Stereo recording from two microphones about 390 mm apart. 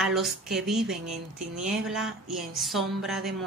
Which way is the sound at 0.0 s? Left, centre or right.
Centre.